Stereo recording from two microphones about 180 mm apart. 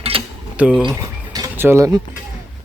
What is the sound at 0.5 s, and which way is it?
Speech, 5° right (ahead or behind).